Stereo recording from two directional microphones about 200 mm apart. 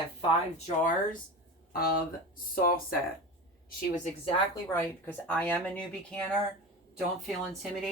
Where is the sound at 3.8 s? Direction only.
40° left (ahead or behind).